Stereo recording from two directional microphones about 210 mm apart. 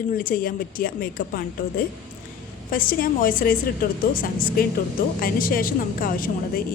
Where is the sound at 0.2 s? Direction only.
40° left (ahead or behind).